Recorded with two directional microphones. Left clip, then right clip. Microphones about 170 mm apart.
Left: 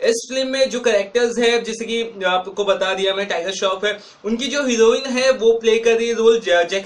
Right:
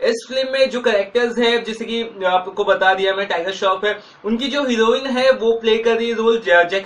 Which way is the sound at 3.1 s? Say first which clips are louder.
Right 1 dB; 40° left (ahead or behind).